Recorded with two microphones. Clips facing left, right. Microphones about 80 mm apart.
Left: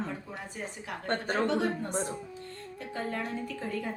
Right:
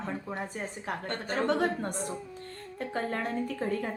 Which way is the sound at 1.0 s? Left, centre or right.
Left.